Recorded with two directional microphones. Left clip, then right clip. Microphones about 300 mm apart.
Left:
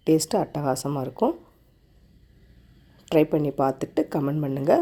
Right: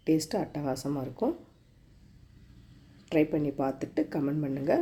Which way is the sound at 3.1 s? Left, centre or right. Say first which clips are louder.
Left 6 dB; left.